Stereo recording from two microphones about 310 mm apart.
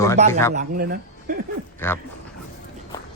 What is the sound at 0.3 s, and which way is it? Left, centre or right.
Speech, centre.